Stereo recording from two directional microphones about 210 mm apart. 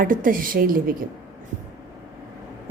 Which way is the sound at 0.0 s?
40° right (ahead or behind).